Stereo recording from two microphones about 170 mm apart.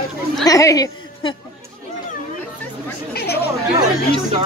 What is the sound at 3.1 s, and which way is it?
Chatter, 70° left (ahead or behind).